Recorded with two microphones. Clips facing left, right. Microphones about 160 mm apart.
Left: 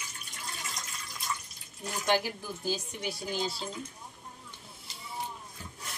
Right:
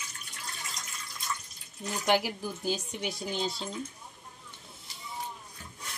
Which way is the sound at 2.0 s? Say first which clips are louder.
Right 2 dB; 15° right (ahead or behind).